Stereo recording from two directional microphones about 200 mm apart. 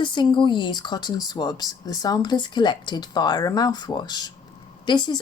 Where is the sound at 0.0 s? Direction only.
25° left (ahead or behind).